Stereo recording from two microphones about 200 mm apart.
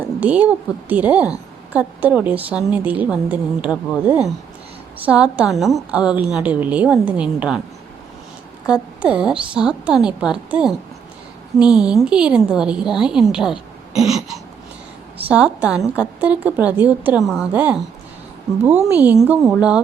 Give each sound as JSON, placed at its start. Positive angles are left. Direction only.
{"t": 0.2, "sound": "a woman's voice", "side_deg": -5}
{"t": 8.6, "sound": "a woman's voice", "side_deg": -5}
{"t": 18.9, "sound": "a woman's voice", "side_deg": -5}